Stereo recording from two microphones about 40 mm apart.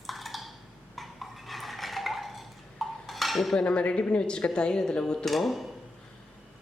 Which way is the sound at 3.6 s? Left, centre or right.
Left.